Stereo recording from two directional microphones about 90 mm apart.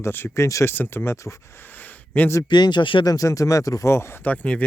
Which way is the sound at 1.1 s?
35° left (ahead or behind).